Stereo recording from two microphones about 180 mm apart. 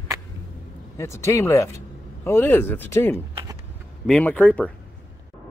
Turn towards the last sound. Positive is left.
turn(degrees=10)  # may be behind; listen again after turning